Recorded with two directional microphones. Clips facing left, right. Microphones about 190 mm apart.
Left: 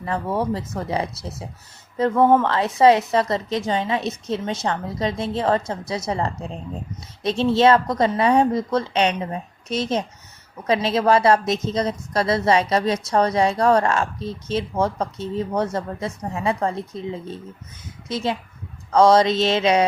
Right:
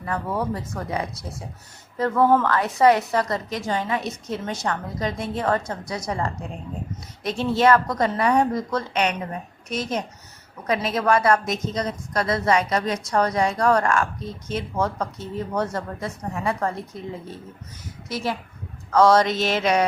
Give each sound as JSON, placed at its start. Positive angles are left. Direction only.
{"t": 0.0, "sound": "speech", "side_deg": 25}